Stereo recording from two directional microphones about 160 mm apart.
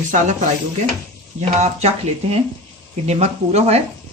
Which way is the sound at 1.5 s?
45° right (ahead or behind).